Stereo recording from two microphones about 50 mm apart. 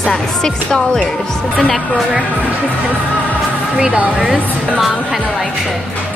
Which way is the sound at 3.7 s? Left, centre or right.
Centre.